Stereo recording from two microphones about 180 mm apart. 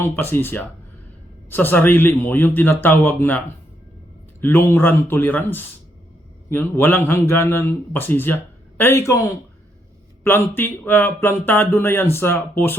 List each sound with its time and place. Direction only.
0.0 s speech: 10° left (ahead or behind)
10.2 s speech: 10° left (ahead or behind)